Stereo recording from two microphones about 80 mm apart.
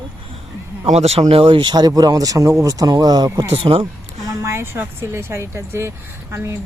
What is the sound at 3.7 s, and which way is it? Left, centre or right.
Speech, right.